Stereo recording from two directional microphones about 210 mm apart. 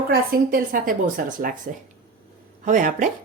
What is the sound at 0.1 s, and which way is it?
Speech, 45° right (ahead or behind).